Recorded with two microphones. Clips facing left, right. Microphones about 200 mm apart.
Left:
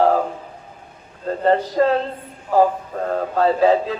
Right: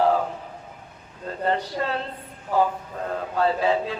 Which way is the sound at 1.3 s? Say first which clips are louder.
Left 7 dB; 40° left (ahead or behind).